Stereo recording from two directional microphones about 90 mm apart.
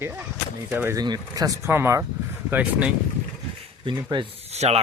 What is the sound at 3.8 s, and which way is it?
Speech, 60° right (ahead or behind).